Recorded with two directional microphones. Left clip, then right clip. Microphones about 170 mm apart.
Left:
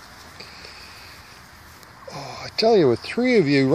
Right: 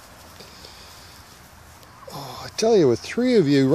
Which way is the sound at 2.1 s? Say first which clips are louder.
Left 1 dB; 10° right (ahead or behind).